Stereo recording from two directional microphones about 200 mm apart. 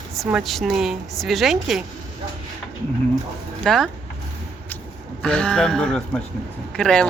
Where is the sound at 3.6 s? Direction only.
Centre (ahead or behind).